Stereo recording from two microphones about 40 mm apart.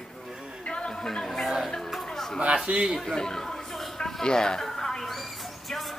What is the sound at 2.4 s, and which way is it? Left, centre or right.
Speech, right.